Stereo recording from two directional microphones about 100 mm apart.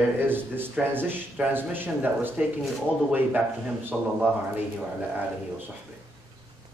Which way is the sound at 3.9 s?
15° right (ahead or behind).